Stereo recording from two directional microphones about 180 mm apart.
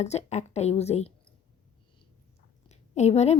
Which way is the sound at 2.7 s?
40° left (ahead or behind).